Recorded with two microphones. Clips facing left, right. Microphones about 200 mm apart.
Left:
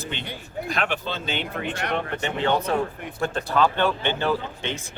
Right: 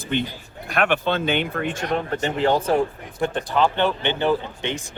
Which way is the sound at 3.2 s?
20° right (ahead or behind).